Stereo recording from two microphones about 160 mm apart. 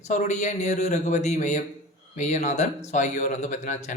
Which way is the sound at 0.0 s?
50° left (ahead or behind).